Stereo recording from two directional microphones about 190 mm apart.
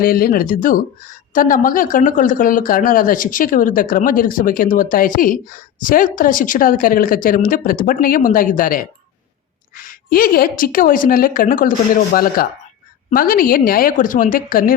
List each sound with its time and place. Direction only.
0.0 s speech: 50° left (ahead or behind)